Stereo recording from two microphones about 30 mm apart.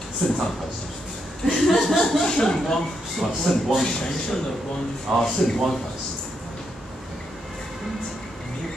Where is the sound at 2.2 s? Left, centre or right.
Centre.